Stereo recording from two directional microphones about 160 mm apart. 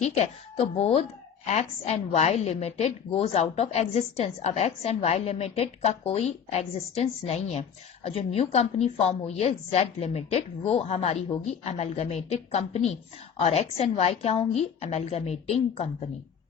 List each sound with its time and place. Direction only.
0.0 s a woman's voice: 45° left (ahead or behind)